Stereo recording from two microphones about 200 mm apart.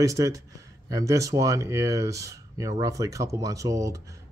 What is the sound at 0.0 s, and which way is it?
Speech, 15° right (ahead or behind).